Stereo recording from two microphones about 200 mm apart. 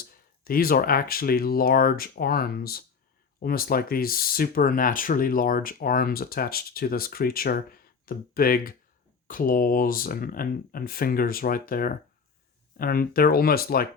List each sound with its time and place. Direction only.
0.0 s speech: 45° left (ahead or behind)